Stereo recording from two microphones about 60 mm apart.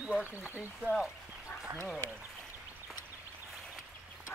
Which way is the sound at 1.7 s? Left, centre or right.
Right.